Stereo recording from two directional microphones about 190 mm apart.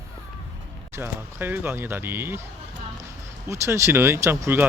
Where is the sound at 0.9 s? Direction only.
10° right (ahead or behind).